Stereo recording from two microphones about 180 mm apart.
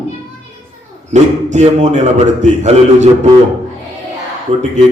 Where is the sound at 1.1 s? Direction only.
40° right (ahead or behind).